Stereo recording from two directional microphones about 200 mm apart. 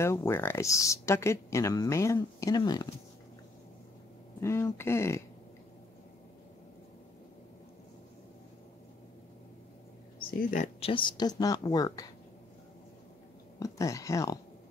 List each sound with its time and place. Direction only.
0.0 s speech: 15° left (ahead or behind)
4.4 s speech: 15° left (ahead or behind)
10.1 s speech: 40° left (ahead or behind); by 12.1 s 20° left (ahead or behind)
13.6 s speech: 15° left (ahead or behind)